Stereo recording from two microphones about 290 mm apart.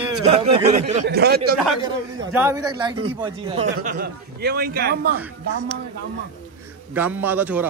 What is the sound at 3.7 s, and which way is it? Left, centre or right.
Speech, right.